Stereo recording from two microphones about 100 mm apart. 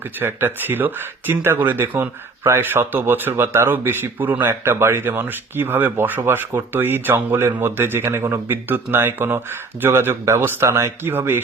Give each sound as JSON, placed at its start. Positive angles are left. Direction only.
{"t": 0.2, "sound": "speech", "side_deg": -20}